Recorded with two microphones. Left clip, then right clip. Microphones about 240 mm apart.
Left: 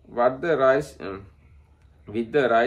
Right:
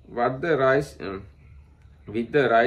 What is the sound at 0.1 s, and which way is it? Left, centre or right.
Speech, centre.